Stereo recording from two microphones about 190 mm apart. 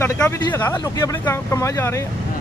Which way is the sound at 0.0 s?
15° left (ahead or behind).